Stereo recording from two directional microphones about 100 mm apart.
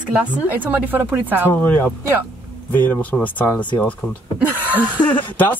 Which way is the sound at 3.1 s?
15° left (ahead or behind).